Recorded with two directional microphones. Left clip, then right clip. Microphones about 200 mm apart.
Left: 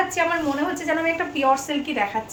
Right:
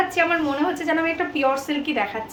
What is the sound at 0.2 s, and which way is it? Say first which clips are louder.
A woman's voice: right 3 dB; 15° right (ahead or behind).